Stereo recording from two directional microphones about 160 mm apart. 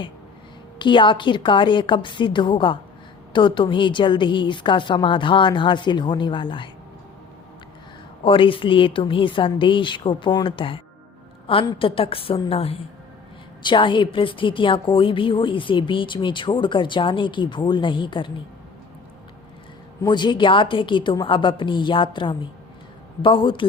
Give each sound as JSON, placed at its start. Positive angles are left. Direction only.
{"t": 0.8, "sound": "a woman's voice", "side_deg": 30}
{"t": 8.2, "sound": "a woman's voice", "side_deg": 35}
{"t": 20.0, "sound": "a woman's voice", "side_deg": 25}